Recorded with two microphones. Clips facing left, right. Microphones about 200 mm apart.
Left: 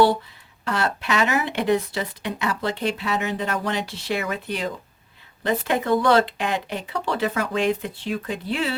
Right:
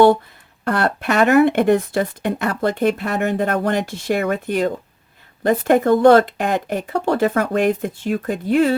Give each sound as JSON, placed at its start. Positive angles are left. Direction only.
{"t": 0.6, "sound": "speech", "side_deg": -55}